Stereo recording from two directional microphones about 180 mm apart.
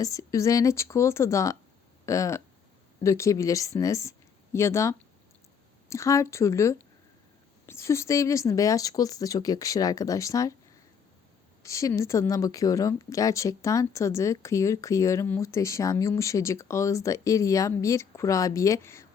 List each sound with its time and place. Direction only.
0.0 s speech: 20° left (ahead or behind)
11.6 s speech: 15° left (ahead or behind)